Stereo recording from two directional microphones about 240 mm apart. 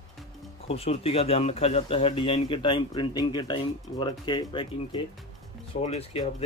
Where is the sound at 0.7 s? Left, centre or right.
Left.